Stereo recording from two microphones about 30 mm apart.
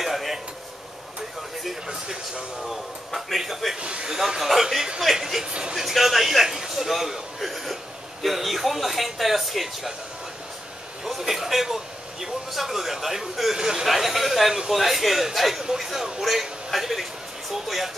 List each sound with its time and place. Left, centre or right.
0.0 s a sound: centre
2.6 s speech: centre
3.8 s speech: right
4.4 s speech: centre
5.8 s speech: centre
6.4 s a sound: centre
6.9 s speech: centre
11.1 s speech: centre
13.6 s speech: right
13.8 s a man's voice: centre